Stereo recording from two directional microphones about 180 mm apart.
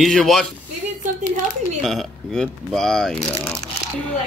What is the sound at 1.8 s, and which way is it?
Speech, centre (ahead or behind).